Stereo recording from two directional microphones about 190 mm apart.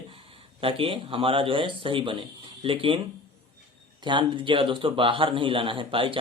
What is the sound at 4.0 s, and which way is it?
A man's voice, 25° right (ahead or behind).